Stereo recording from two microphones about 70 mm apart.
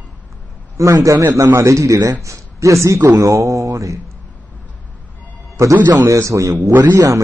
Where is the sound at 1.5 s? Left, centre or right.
Right.